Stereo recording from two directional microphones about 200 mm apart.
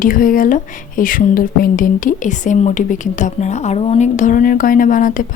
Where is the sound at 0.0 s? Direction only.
45° left (ahead or behind).